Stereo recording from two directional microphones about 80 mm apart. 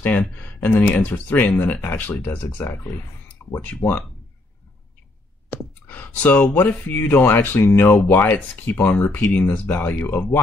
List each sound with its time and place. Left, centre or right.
0.0 s speech: centre
3.8 s speech: left
5.5 s speech: left